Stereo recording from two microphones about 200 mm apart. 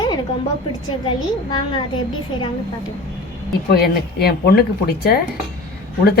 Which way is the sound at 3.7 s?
55° left (ahead or behind).